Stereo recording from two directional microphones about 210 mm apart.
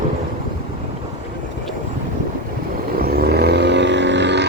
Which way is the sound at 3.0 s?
45° right (ahead or behind).